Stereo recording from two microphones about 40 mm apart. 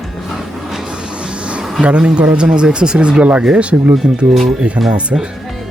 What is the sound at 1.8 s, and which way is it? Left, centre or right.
Speech, right.